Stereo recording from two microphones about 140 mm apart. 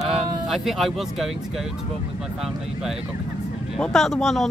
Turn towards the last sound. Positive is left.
turn(degrees=0)  # may be behind; listen again after turning